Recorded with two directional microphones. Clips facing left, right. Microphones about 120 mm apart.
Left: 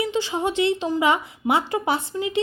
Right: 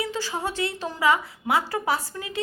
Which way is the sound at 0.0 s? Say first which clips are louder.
Left 5 dB; 20° left (ahead or behind).